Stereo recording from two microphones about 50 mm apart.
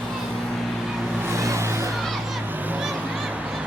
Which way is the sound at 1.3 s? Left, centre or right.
Right.